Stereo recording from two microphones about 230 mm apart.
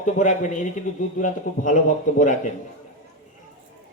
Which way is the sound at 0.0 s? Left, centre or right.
Left.